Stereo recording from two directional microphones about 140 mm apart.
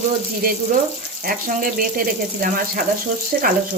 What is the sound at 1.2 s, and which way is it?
Speech, 85° right.